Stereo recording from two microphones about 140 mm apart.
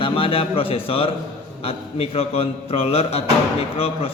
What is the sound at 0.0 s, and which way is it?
A man's voice, 40° left (ahead or behind).